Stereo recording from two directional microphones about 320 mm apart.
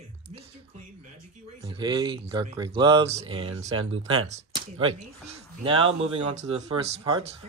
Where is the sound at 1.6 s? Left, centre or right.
Centre.